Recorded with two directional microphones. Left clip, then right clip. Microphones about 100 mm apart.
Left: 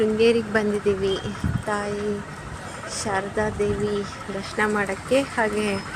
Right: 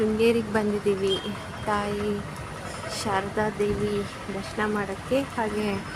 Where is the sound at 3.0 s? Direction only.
15° left (ahead or behind).